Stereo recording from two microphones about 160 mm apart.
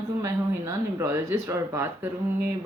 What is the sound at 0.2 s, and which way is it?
Speech, 20° right (ahead or behind).